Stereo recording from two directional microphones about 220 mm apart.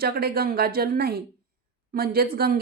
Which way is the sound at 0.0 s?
45° right (ahead or behind).